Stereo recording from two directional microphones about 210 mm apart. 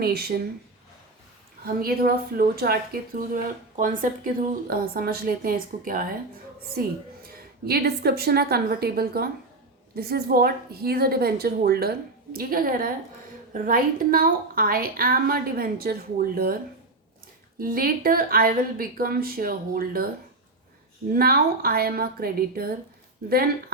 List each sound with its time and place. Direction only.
0.0 s a woman's voice: 50° right (ahead or behind)
1.6 s a woman's voice: 45° right (ahead or behind)
17.6 s a woman's voice: 45° right (ahead or behind)
21.1 s a woman's voice: 45° right (ahead or behind)